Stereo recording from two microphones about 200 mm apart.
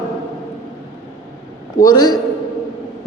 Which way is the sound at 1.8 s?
20° left (ahead or behind).